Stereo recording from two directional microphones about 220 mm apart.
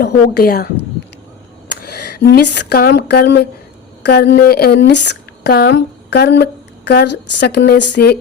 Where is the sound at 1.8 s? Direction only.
50° left (ahead or behind).